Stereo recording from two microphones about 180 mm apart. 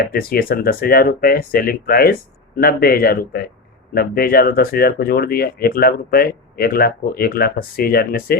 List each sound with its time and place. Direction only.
0.0 s speech: 55° left (ahead or behind)